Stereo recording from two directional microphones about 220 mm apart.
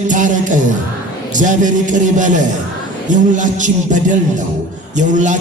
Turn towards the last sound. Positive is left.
turn(degrees=-35)  # may be behind; listen again after turning